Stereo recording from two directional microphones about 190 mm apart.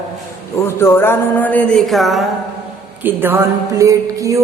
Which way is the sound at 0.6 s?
15° left (ahead or behind).